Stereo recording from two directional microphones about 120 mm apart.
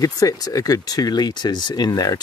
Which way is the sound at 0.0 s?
30° left (ahead or behind).